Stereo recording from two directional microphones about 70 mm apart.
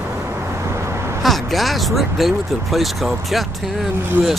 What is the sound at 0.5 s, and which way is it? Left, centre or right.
Vehicle, right.